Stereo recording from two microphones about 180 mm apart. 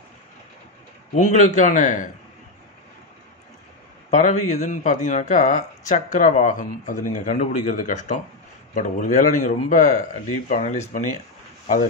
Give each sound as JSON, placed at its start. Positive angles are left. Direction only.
{"t": 1.1, "sound": "speech", "side_deg": 45}
{"t": 4.1, "sound": "speech", "side_deg": 40}